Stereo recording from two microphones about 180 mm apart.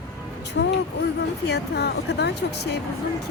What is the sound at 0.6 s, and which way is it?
Speech, 75° left (ahead or behind).